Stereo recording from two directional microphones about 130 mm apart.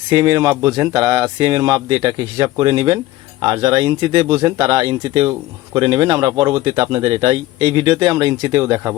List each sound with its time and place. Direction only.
0.1 s speech: 30° right (ahead or behind)
4.5 s speech: 40° right (ahead or behind); by 9.0 s 20° right (ahead or behind)